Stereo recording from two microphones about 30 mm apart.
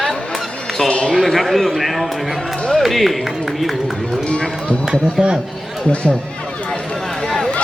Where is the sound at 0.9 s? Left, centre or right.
Left.